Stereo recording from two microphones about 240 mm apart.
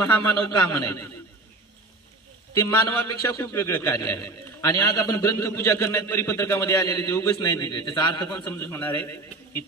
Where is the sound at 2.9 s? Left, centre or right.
Left.